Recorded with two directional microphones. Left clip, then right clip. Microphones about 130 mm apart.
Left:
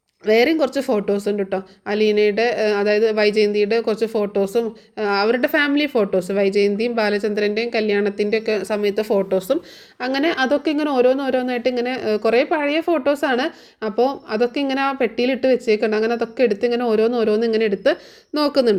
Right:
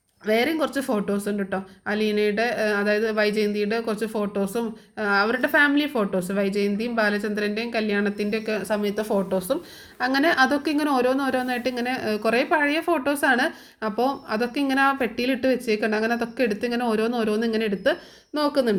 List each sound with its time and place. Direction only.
0.3 s speech: 45° left (ahead or behind)
10.0 s speech: 30° left (ahead or behind)
18.3 s speech: 55° left (ahead or behind)